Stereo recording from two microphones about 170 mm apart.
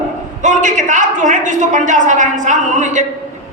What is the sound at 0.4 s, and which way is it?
A woman's voice, 45° right (ahead or behind).